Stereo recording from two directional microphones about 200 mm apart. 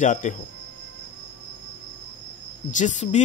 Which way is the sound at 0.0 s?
40° left (ahead or behind).